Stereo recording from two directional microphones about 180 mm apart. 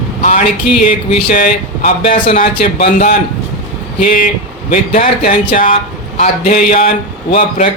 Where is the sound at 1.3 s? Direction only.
55° left (ahead or behind).